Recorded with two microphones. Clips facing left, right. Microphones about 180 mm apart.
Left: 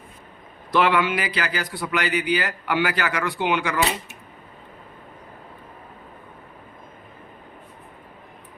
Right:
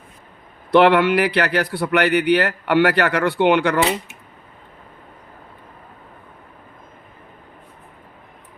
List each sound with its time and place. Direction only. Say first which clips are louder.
0.7 s speech: right 7 dB; 65° right (ahead or behind)